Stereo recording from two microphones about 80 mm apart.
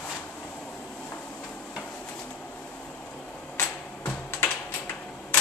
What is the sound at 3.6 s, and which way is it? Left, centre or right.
Computer keyboard, left.